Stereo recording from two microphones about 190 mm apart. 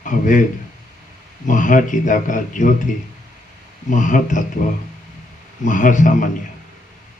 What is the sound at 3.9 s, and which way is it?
Speech, 40° left (ahead or behind).